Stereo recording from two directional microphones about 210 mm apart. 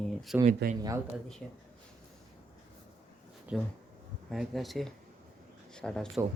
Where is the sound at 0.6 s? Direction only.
50° right (ahead or behind).